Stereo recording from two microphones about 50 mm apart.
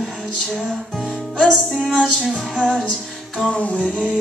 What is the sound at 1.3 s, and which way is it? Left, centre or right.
Music, centre.